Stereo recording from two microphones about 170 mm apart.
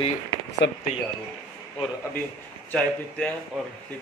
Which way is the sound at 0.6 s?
90° left.